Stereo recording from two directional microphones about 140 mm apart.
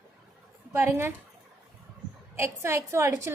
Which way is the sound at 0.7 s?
20° right (ahead or behind).